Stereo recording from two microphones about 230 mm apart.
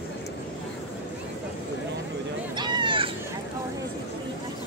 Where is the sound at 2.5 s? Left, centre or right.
Centre.